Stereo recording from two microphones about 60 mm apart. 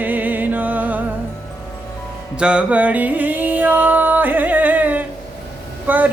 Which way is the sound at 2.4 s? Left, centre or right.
Centre.